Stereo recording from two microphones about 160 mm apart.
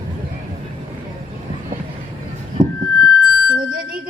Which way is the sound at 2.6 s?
55° right (ahead or behind).